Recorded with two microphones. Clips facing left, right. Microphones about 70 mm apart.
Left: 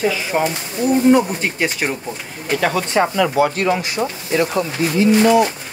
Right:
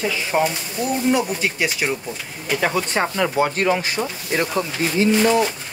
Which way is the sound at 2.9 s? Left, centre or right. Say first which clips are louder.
Left 7 dB; centre.